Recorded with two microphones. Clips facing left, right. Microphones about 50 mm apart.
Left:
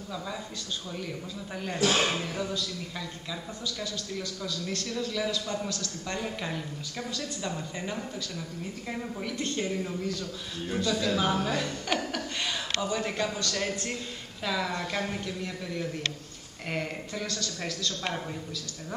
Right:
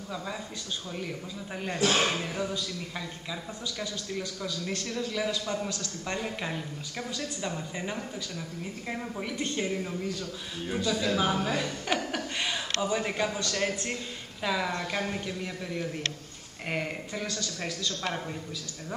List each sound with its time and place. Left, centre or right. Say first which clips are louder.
0.9 s speech: even; centre
6.1 s a man's voice: even; centre